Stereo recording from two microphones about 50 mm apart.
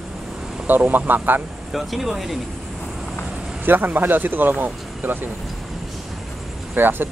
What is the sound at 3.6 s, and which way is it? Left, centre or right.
Speech, right.